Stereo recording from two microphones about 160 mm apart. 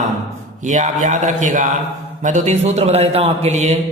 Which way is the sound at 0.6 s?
50° right (ahead or behind).